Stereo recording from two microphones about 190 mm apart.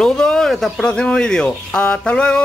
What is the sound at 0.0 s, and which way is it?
Speech, 5° left (ahead or behind).